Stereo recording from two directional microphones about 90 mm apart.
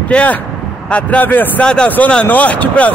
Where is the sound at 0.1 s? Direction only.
15° left (ahead or behind).